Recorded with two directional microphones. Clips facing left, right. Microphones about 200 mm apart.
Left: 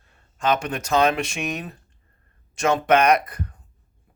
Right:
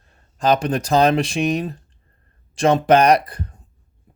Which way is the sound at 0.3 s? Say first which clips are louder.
Right 5 dB; 35° right (ahead or behind).